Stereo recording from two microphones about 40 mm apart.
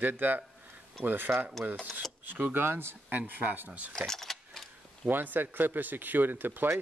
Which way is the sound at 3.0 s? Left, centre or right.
Right.